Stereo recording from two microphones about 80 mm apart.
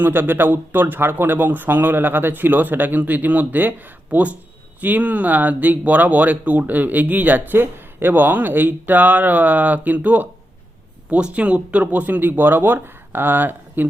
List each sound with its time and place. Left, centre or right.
0.0 s speech: right